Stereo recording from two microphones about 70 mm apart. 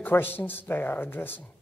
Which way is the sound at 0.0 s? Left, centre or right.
Left.